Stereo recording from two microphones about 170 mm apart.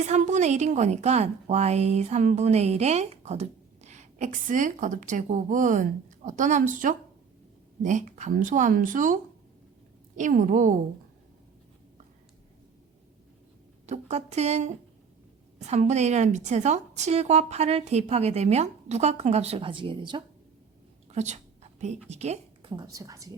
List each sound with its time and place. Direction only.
0.0 s a woman's voice: 45° right (ahead or behind)
10.2 s a woman's voice: 45° right (ahead or behind)
13.8 s a woman's voice: 40° right (ahead or behind)
21.1 s a sound: 40° right (ahead or behind)
22.7 s a woman's voice: 20° right (ahead or behind)